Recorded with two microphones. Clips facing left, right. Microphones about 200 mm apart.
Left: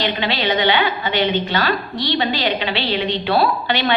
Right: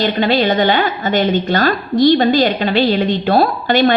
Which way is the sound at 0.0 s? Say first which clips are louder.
Right 7 dB; 45° right (ahead or behind).